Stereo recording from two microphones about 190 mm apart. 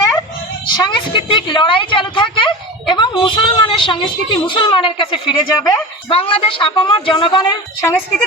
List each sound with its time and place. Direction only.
0.2 s a woman's voice: 20° left (ahead or behind)